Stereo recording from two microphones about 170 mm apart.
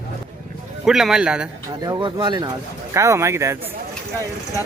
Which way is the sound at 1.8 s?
25° right (ahead or behind).